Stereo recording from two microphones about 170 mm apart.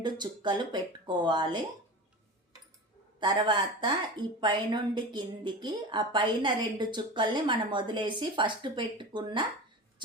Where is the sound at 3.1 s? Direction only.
30° right (ahead or behind).